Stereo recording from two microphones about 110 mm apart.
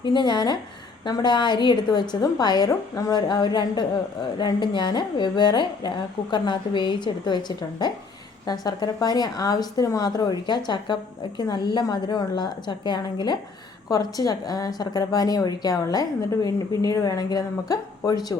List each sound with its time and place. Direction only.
0.0 s a woman's voice: 45° left (ahead or behind)